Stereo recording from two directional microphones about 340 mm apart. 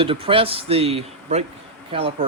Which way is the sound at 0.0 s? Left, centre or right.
Centre.